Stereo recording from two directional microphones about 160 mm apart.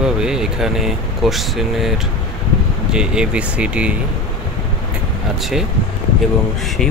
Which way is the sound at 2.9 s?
5° right (ahead or behind).